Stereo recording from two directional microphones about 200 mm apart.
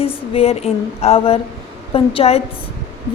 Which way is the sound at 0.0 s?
30° left (ahead or behind).